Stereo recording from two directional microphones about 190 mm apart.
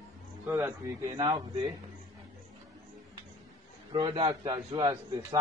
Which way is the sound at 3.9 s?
20° right (ahead or behind).